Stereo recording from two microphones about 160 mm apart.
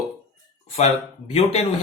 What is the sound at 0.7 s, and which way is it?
Speech, 40° left (ahead or behind).